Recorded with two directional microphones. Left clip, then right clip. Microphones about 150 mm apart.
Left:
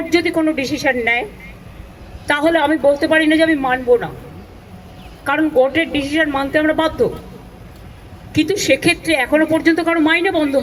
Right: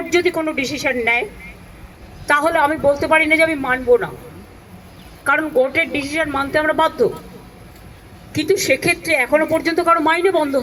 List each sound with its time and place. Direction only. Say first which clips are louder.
0.2 s a woman's voice: right 1 dB; 25° right (ahead or behind)
5.2 s a woman's voice: left 1 dB; 20° right (ahead or behind)
8.4 s a woman's voice: left 1 dB; 30° right (ahead or behind)